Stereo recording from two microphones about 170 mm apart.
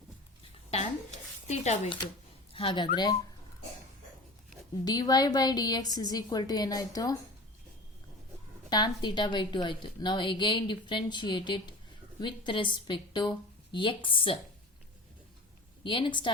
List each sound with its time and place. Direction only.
1.5 s a woman's voice: 40° left (ahead or behind); by 3.2 s 25° left (ahead or behind)
4.9 s a woman's voice: 25° left (ahead or behind)
8.7 s a woman's voice: 25° left (ahead or behind)
15.8 s a woman's voice: 30° left (ahead or behind)